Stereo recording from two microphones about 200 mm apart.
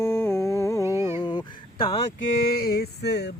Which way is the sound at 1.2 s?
25° left (ahead or behind).